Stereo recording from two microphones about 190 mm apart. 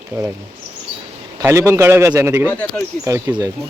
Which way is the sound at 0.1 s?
20° right (ahead or behind).